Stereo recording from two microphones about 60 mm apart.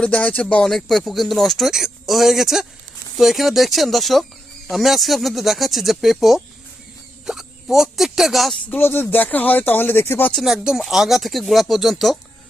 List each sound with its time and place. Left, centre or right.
0.0 s speech: centre
0.6 s speech: centre
8.7 s speech: left
10.4 s speech: centre